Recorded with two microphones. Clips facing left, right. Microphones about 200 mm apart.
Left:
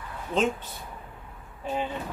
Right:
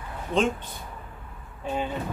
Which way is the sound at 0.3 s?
5° left (ahead or behind).